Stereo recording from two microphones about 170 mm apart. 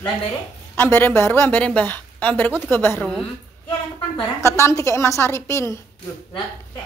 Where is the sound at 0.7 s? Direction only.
15° left (ahead or behind).